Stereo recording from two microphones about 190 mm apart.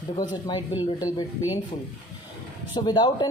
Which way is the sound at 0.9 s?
20° left (ahead or behind).